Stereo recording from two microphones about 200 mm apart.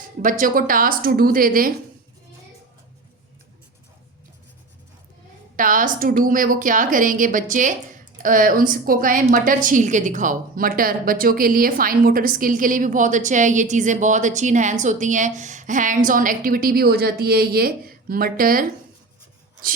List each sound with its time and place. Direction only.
0.2 s a woman's voice: 40° right (ahead or behind)
5.5 s a woman's voice: 40° right (ahead or behind)